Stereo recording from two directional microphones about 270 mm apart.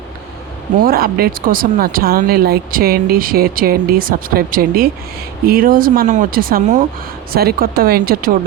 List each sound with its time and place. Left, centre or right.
0.8 s speech: right